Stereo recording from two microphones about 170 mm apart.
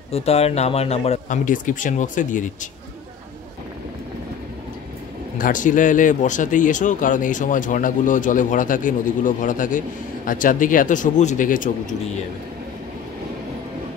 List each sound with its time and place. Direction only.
0.1 s speech: 35° left (ahead or behind)
5.4 s speech: 50° left (ahead or behind)